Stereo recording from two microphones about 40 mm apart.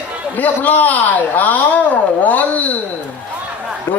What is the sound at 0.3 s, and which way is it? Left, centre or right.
Speech, left.